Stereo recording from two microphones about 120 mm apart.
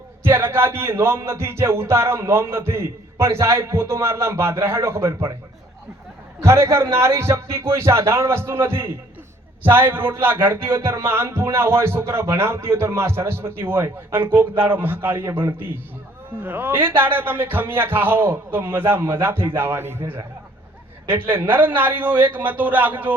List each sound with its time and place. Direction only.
0.2 s music: 20° right (ahead or behind)
6.4 s music: 20° right (ahead or behind)
16.4 s a man's voice: 15° right (ahead or behind)
21.2 s a man's voice: 15° right (ahead or behind)